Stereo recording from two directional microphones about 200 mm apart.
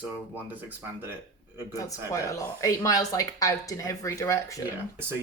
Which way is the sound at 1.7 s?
15° left (ahead or behind).